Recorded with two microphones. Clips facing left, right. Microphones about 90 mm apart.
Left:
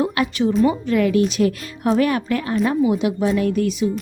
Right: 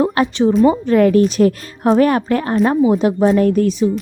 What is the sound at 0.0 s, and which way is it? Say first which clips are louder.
A woman's voice: right 5 dB; 35° right (ahead or behind).